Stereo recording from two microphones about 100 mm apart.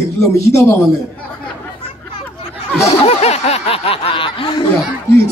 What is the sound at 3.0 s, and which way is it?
Speech, 90° left.